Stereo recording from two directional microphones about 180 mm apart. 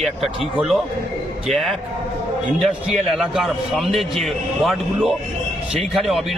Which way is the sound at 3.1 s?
Centre (ahead or behind).